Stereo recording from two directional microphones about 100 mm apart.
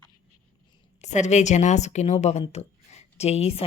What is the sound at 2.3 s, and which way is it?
A woman's voice, 90° left.